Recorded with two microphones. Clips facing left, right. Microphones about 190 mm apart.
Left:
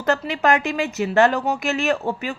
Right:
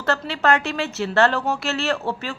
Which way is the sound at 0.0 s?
15° left (ahead or behind).